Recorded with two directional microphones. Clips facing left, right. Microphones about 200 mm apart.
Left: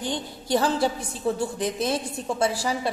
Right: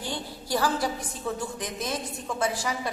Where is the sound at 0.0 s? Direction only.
20° left (ahead or behind).